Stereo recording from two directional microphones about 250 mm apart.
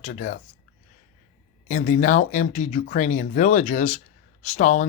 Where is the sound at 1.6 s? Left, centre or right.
Left.